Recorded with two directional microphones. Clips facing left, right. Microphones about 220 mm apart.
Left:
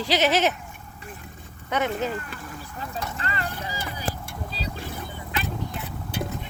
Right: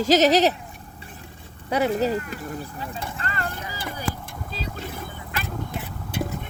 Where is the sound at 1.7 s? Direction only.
35° right (ahead or behind).